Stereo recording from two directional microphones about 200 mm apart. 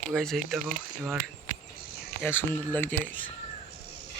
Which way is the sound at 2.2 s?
10° left (ahead or behind).